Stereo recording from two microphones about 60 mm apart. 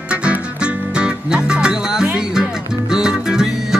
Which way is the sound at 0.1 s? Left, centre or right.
Centre.